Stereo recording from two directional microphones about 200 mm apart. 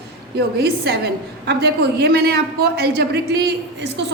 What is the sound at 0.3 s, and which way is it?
A woman's voice, 50° right (ahead or behind).